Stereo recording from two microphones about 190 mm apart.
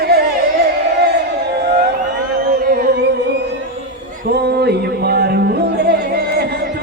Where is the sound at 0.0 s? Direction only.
55° right (ahead or behind).